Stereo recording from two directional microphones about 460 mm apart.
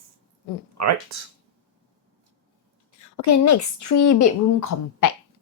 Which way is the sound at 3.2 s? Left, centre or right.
Left.